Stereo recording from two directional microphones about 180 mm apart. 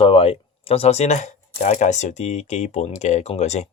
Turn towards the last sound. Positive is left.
turn(degrees=40)  # may be behind; listen again after turning